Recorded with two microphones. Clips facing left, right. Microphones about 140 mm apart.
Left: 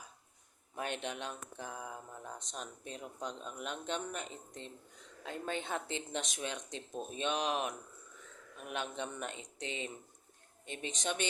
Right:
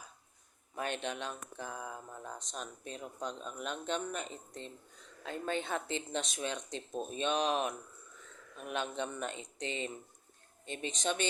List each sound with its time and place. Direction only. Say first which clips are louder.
0.8 s speech: right 2 dB; 15° left (ahead or behind)
5.2 s speech: right 3 dB; 15° left (ahead or behind)